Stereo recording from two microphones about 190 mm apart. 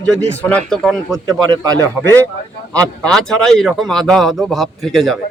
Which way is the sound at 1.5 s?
20° right (ahead or behind).